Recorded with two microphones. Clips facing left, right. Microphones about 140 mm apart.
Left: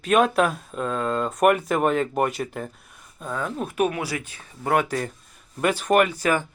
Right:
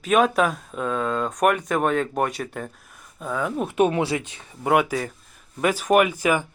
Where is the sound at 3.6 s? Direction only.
20° right (ahead or behind).